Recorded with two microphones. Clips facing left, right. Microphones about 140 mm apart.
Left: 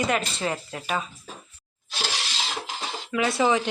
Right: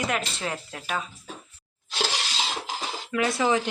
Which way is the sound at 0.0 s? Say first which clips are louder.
Left 3 dB; centre (ahead or behind).